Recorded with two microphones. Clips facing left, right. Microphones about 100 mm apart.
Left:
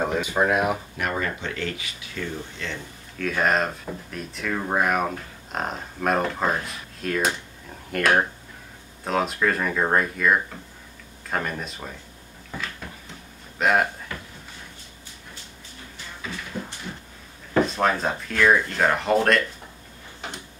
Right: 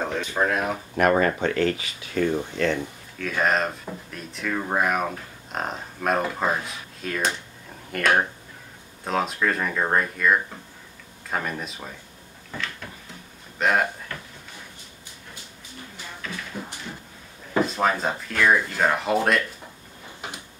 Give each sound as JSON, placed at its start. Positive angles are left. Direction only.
{"t": 0.0, "sound": "speech", "side_deg": 10}
{"t": 0.9, "sound": "speech", "side_deg": -50}
{"t": 3.2, "sound": "speech", "side_deg": 0}
{"t": 12.5, "sound": "a sound", "side_deg": 5}
{"t": 13.6, "sound": "speech", "side_deg": 0}
{"t": 17.6, "sound": "speech", "side_deg": 0}